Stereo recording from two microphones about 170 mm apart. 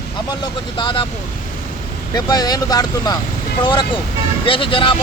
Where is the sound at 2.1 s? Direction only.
25° left (ahead or behind).